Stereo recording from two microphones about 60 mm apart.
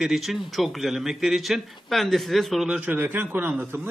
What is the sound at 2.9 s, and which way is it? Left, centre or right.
Speech, right.